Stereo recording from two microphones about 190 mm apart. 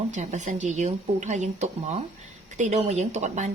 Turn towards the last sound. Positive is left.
turn(degrees=-40)  # may be behind; listen again after turning